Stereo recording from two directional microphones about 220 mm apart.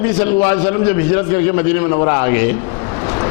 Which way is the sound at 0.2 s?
15° left (ahead or behind).